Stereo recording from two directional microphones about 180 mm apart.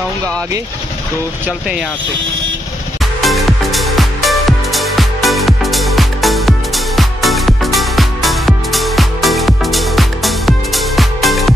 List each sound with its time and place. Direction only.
3.2 s music: centre (ahead or behind)